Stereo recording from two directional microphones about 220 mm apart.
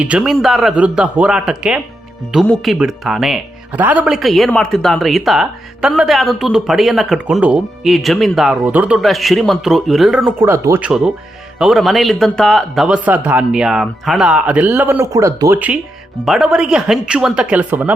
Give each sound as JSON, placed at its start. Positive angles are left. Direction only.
{"t": 0.0, "sound": "speech", "side_deg": -5}